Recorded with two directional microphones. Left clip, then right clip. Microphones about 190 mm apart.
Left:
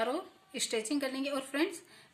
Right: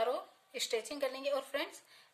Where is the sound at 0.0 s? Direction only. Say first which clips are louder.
Left 1 dB; 5° right (ahead or behind).